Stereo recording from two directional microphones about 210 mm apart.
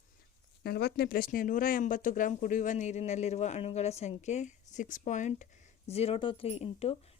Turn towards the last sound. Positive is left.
turn(degrees=30)  # may be behind; listen again after turning